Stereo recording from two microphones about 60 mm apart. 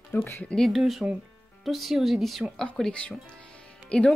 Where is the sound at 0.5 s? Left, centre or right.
Centre.